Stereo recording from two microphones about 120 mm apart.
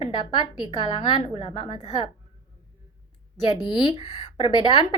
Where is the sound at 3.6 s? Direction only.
40° left (ahead or behind).